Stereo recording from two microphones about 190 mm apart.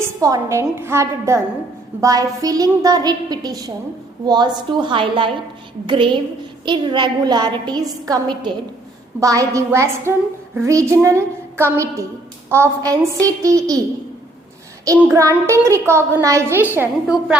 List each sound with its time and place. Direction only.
0.0 s a woman's voice: 20° right (ahead or behind)
14.9 s a woman's voice: 15° right (ahead or behind)